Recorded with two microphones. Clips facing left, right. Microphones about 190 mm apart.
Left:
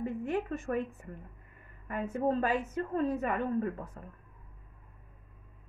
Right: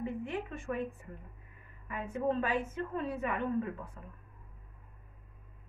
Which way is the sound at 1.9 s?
45° left (ahead or behind).